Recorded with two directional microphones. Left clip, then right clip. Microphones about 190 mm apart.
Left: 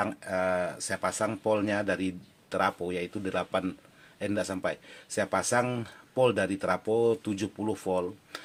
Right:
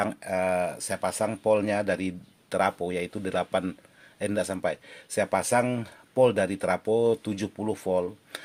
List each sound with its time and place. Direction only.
0.0 s speech: 35° right (ahead or behind)